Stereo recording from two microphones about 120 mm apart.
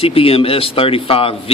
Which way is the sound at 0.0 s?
55° left (ahead or behind).